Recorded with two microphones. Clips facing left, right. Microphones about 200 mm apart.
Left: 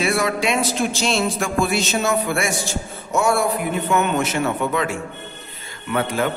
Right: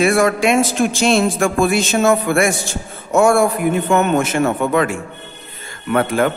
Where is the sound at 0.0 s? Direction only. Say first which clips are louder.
Right 6 dB; 50° right (ahead or behind).